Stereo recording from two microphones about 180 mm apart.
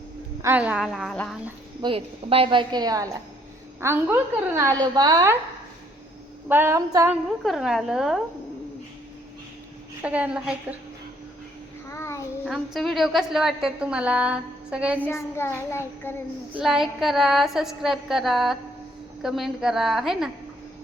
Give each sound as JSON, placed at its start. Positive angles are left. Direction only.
{"t": 0.4, "sound": "a woman's voice", "side_deg": -10}
{"t": 1.8, "sound": "a woman's voice", "side_deg": -30}
{"t": 6.5, "sound": "a woman's voice", "side_deg": -15}
{"t": 7.4, "sound": "a woman's voice", "side_deg": 0}
{"t": 10.0, "sound": "a woman's voice", "side_deg": -5}
{"t": 11.9, "sound": "child singing", "side_deg": 15}
{"t": 12.5, "sound": "a woman's voice", "side_deg": 0}
{"t": 15.0, "sound": "a child's voice", "side_deg": 15}
{"t": 16.6, "sound": "a woman's voice", "side_deg": 0}